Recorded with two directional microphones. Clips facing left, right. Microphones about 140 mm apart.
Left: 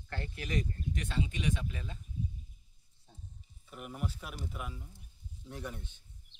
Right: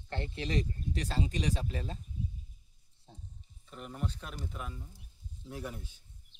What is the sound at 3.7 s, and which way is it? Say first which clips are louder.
Speech: right 1 dB; 10° left (ahead or behind).